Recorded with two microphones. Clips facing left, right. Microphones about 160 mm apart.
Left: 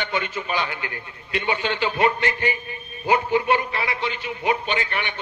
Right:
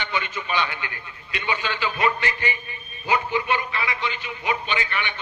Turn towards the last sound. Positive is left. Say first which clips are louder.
# left 2 dB
turn(degrees=50)  # may be behind; listen again after turning